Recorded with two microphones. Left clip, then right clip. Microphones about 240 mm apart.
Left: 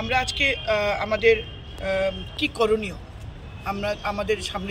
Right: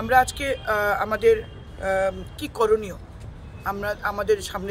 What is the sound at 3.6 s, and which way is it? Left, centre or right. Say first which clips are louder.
Speech: right 1 dB; right.